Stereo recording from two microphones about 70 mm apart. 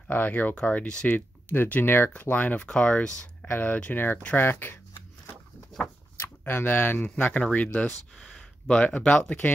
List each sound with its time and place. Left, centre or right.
0.1 s speech: left
3.4 s speech: left
6.1 s speech: left
7.1 s speech: centre